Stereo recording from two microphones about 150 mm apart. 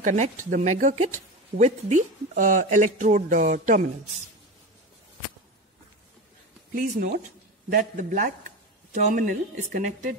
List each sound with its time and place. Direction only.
0.0 s speech: 55° right (ahead or behind)
6.7 s speech: 65° right (ahead or behind)